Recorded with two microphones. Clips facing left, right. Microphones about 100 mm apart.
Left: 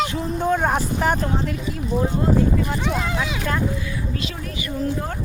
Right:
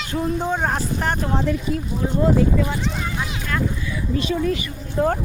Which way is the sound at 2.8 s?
75° left (ahead or behind).